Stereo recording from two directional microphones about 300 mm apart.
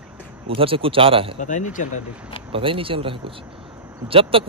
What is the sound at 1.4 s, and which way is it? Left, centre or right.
Speech, left.